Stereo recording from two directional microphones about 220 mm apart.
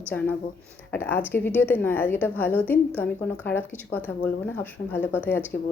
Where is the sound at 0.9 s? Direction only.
10° left (ahead or behind).